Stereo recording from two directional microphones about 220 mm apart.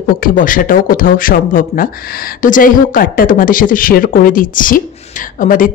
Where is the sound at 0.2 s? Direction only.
40° left (ahead or behind).